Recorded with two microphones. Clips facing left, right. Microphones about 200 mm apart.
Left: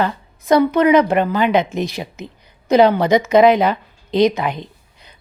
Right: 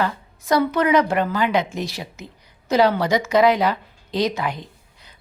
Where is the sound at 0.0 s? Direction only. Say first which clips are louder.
Left 3 dB; 20° left (ahead or behind).